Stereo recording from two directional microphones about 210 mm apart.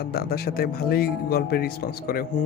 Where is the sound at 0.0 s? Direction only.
50° left (ahead or behind).